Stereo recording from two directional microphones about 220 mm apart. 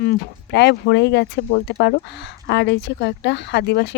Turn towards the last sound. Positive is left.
turn(degrees=50)  # may be behind; listen again after turning